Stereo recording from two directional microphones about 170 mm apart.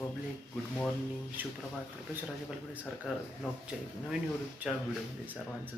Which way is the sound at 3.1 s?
5° right (ahead or behind).